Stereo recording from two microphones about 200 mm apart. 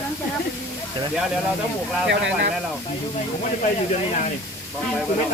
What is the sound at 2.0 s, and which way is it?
Speech, 65° right (ahead or behind).